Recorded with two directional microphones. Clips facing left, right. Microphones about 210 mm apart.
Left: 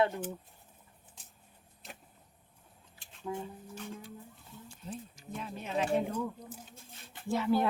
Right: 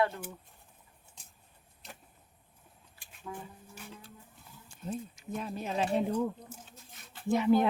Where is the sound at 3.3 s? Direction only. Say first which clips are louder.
Left 5 dB; 20° left (ahead or behind).